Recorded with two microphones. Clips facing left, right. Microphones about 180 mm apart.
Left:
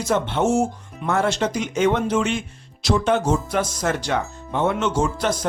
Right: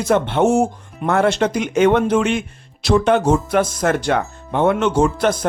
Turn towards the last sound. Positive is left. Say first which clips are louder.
# right 5 dB
turn(degrees=-60)  # may be behind; listen again after turning